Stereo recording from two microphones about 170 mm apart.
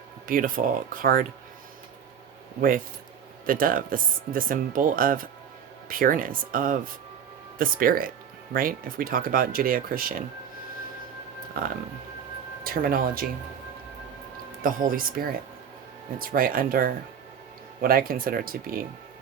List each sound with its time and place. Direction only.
0.3 s speech: 55° right (ahead or behind)
2.6 s speech: 55° right (ahead or behind)
11.6 s speech: 55° right (ahead or behind)
14.6 s speech: 55° right (ahead or behind)